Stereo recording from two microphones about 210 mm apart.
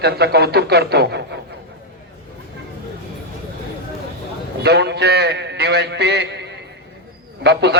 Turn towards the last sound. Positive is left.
turn(degrees=-55)  # may be behind; listen again after turning